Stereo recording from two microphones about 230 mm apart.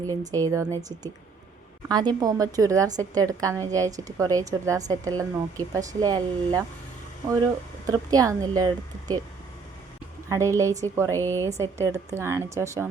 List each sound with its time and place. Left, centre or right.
0.1 s a woman's voice: centre
7.9 s a woman's voice: centre
10.2 s a woman's voice: centre
11.1 s a woman's voice: centre
11.4 s a woman's voice: centre